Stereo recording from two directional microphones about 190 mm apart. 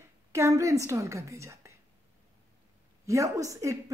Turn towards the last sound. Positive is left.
turn(degrees=-15)  # may be behind; listen again after turning